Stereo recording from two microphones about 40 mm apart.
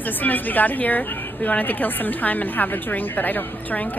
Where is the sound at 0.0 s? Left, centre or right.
Left.